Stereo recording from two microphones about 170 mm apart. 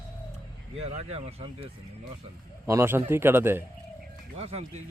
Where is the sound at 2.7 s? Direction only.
15° right (ahead or behind).